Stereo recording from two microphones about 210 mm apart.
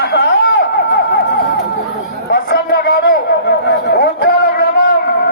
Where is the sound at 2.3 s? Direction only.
50° left (ahead or behind).